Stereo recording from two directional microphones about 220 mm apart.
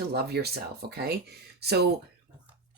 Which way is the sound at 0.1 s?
45° right (ahead or behind).